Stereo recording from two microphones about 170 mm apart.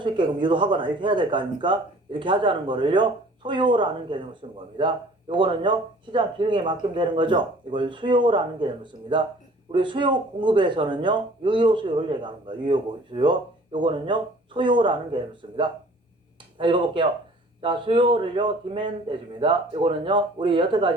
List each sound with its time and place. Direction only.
0.0 s speech: 30° right (ahead or behind)